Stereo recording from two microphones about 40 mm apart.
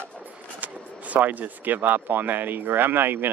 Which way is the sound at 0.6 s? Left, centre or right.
Right.